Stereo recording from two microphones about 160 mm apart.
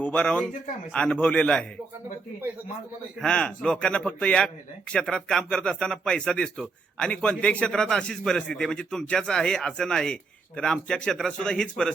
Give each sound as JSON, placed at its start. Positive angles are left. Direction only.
{"t": 0.0, "sound": "a man's voice", "side_deg": 10}
{"t": 3.2, "sound": "speech", "side_deg": 5}